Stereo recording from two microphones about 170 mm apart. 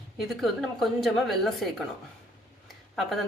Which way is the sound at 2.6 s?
Centre (ahead or behind).